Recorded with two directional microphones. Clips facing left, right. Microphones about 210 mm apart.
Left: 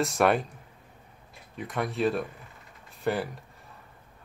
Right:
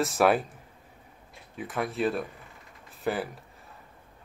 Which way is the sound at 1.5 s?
Centre (ahead or behind).